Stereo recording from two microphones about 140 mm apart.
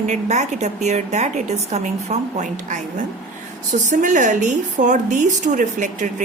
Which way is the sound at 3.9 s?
65° right (ahead or behind).